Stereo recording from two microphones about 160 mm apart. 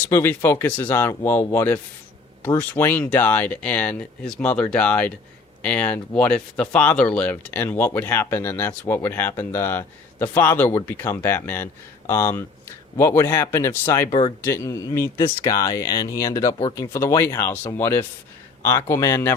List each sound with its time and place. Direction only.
0.1 s speech: 15° left (ahead or behind)